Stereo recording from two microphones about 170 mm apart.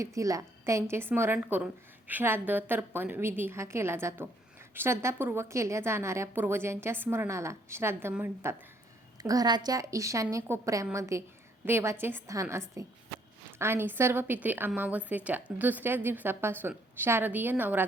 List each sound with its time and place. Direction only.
0.0 s a woman's voice: 20° right (ahead or behind)